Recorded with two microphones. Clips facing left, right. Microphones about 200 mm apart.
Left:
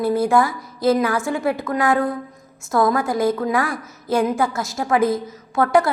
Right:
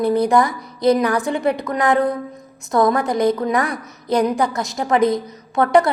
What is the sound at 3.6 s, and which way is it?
Speech, 20° right (ahead or behind).